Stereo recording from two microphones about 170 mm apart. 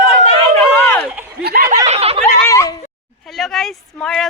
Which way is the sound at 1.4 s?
60° right (ahead or behind).